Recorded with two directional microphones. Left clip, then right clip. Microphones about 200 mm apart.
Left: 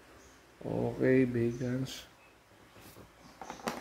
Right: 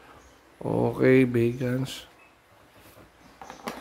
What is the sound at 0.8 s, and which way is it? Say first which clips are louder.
A man's voice: right 7 dB; 30° right (ahead or behind).